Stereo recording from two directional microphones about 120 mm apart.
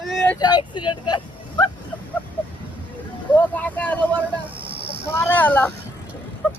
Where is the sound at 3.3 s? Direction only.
10° left (ahead or behind).